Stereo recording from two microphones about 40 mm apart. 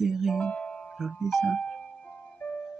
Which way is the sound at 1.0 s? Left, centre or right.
Centre.